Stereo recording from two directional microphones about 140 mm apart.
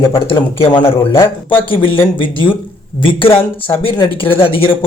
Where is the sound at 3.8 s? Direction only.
40° left (ahead or behind).